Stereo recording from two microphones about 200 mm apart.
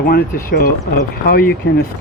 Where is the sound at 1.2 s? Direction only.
45° left (ahead or behind).